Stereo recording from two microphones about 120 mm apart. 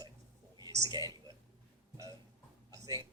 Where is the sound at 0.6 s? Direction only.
30° right (ahead or behind).